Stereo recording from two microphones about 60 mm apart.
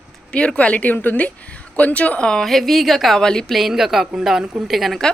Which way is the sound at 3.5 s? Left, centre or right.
Centre.